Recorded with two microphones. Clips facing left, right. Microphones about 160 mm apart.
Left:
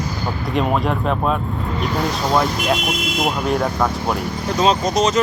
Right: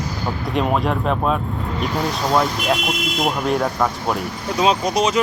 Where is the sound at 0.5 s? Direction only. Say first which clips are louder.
Left 1 dB; centre (ahead or behind).